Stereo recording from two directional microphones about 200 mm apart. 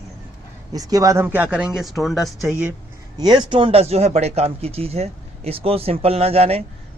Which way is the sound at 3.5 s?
30° right (ahead or behind).